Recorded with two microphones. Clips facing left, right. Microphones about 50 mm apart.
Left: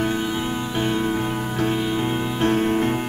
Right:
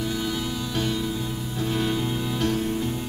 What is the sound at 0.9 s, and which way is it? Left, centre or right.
Music, left.